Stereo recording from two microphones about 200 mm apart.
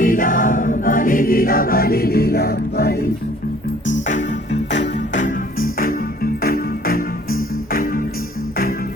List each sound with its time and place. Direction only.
0.0 s choir: 40° left (ahead or behind)
5.1 s music: 40° left (ahead or behind)